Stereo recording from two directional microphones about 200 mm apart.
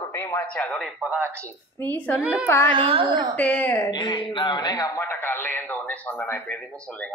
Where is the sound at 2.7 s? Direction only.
25° right (ahead or behind).